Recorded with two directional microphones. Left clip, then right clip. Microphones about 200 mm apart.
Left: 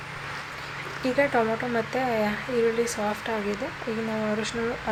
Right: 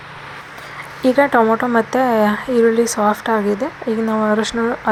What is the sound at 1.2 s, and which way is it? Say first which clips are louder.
Speech: right 9 dB; 20° right (ahead or behind).